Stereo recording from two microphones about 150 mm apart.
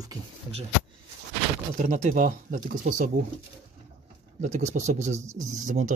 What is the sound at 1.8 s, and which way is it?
Speech, 55° right (ahead or behind).